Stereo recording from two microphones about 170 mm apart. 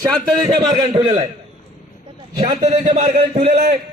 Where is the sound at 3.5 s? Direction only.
60° right (ahead or behind).